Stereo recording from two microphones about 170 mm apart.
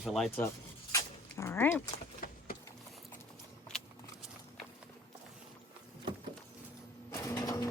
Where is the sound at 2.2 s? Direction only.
55° left (ahead or behind).